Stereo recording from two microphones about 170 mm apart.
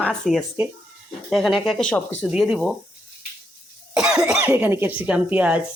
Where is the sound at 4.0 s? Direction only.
5° right (ahead or behind).